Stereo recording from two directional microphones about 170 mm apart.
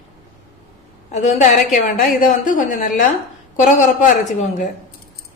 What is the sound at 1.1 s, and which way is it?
A woman's voice, 45° left (ahead or behind).